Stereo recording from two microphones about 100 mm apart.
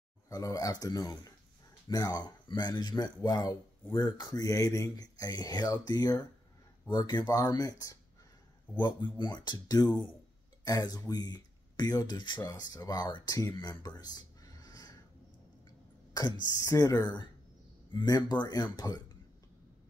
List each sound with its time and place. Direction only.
0.3 s speech: 35° left (ahead or behind)
8.7 s speech: 45° left (ahead or behind)
13.6 s a sound: 40° left (ahead or behind)
16.1 s a woman's voice: 40° left (ahead or behind)